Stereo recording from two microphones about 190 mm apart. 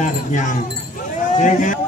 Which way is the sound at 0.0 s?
40° left (ahead or behind).